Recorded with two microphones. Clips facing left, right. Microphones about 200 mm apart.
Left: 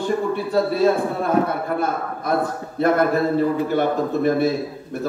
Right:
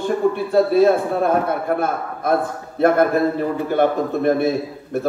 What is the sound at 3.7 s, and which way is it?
Speech, 55° right (ahead or behind).